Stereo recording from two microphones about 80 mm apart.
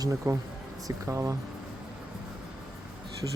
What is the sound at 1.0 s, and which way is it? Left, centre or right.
Speech, right.